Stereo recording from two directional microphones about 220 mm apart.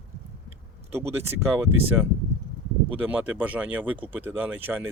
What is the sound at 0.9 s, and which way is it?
Speech, 10° right (ahead or behind).